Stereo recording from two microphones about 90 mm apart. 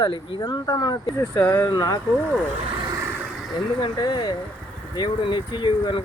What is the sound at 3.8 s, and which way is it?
Speech, 55° left (ahead or behind).